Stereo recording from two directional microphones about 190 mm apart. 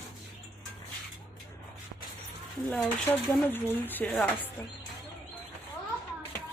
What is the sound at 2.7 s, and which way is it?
Speech, 10° left (ahead or behind).